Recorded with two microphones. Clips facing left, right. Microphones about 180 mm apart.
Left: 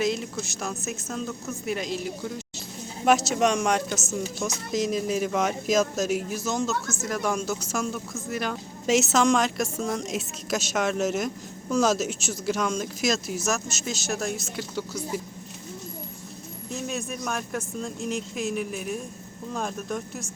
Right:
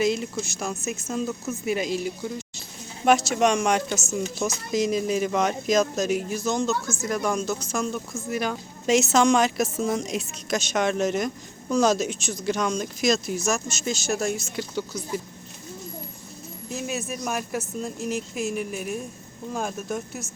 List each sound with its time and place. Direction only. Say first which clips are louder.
0.0 s speech: right 3 dB; centre (ahead or behind)
16.6 s speech: right 1 dB; 5° right (ahead or behind)